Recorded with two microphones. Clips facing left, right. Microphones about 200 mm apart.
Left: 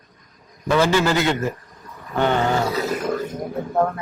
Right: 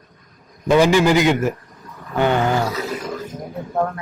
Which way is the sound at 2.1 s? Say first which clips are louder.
Right 2 dB; 10° right (ahead or behind).